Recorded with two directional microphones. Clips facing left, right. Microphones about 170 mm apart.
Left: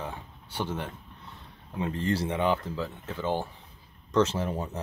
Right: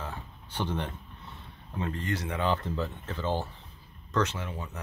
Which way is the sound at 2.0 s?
30° left (ahead or behind).